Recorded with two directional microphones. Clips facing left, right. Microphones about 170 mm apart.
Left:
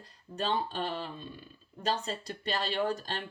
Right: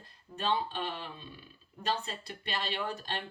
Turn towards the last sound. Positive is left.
turn(degrees=40)  # may be behind; listen again after turning